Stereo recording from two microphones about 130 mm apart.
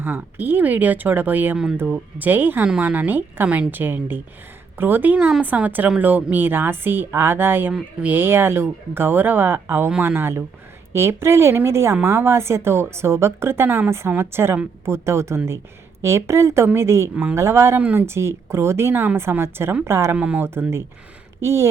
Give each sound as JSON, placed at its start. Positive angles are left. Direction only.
{"t": 0.0, "sound": "speech", "side_deg": -15}